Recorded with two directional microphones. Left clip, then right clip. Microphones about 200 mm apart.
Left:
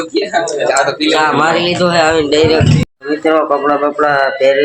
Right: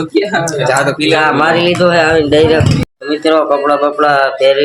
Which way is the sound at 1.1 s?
5° left (ahead or behind).